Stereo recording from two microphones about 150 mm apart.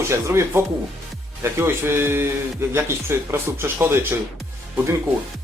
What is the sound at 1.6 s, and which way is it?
Speech, 15° right (ahead or behind).